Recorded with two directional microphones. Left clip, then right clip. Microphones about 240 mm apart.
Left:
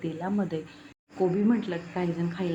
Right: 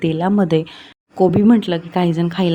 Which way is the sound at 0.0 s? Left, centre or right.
Right.